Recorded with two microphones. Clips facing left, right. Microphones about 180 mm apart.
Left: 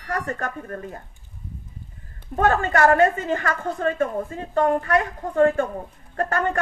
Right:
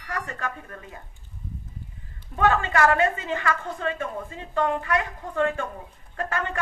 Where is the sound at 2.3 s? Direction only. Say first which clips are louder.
Left 2 dB; 45° left (ahead or behind).